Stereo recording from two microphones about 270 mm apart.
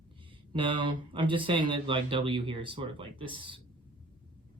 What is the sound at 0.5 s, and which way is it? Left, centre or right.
Speech, centre.